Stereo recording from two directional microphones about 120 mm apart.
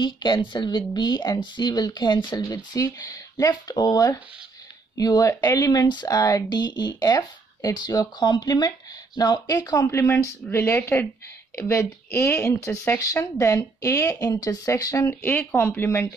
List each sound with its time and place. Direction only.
0.0 s speech: 40° left (ahead or behind); by 16.1 s 15° left (ahead or behind)